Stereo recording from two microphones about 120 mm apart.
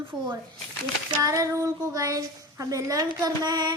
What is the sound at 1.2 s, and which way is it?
A woman's voice, 30° right (ahead or behind).